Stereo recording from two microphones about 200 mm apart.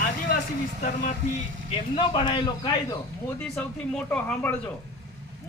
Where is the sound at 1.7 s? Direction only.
25° left (ahead or behind).